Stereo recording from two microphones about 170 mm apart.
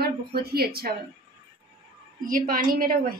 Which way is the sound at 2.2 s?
55° right (ahead or behind).